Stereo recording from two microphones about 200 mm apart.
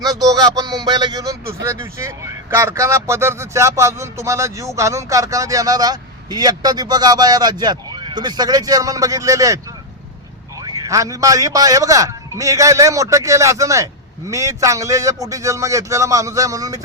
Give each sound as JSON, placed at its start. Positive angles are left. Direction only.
{"t": 0.0, "sound": "speech", "side_deg": -20}
{"t": 10.6, "sound": "speech", "side_deg": -20}